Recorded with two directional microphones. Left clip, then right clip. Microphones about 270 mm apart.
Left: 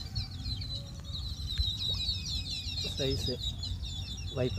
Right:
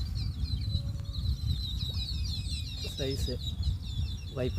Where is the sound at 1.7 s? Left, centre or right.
Centre.